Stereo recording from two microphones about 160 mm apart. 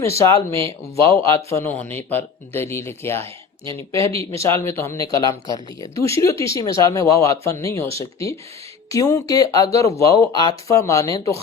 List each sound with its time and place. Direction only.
0.0 s speech: 15° left (ahead or behind)
4.1 s speech: 40° right (ahead or behind)
4.4 s speech: 15° left (ahead or behind)